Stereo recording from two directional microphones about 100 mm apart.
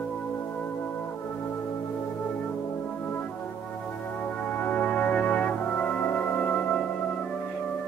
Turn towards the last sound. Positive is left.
turn(degrees=15)  # may be behind; listen again after turning